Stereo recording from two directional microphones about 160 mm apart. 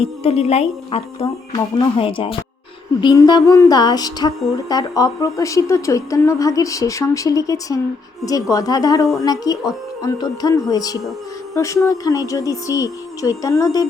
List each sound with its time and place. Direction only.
0.0 s speech: 40° left (ahead or behind); by 13.8 s 20° left (ahead or behind)